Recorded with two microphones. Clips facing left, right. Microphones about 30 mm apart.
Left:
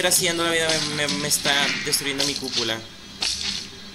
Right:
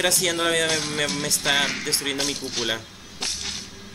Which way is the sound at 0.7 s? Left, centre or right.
Left.